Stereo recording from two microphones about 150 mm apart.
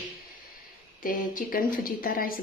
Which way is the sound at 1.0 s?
70° left (ahead or behind).